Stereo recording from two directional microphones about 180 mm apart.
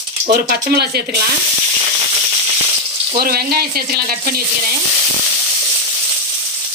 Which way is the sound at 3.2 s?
55° right (ahead or behind).